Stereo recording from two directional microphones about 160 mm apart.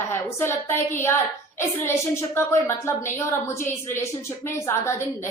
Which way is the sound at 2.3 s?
15° left (ahead or behind).